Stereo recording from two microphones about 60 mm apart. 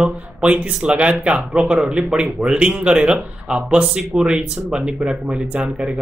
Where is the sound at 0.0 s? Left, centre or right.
Centre.